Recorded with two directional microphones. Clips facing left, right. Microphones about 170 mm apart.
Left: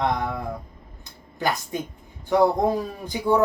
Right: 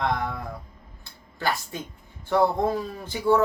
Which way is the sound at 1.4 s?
15° left (ahead or behind).